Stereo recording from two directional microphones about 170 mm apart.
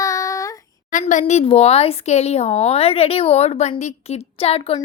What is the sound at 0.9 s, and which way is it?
Speech, 50° left (ahead or behind).